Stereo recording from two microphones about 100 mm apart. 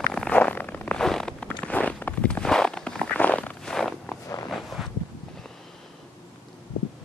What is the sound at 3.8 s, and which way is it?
Walk, 5° left (ahead or behind).